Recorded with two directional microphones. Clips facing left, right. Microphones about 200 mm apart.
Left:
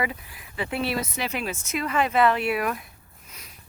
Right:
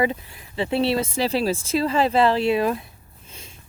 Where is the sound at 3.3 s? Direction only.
25° right (ahead or behind).